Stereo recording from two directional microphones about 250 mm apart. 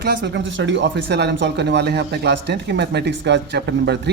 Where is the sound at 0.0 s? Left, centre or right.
Right.